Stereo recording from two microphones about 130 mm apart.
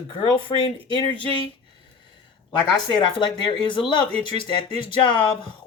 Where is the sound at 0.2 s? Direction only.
40° left (ahead or behind).